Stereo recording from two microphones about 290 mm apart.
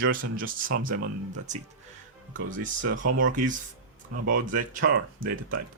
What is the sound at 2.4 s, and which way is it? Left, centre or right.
Speech, right.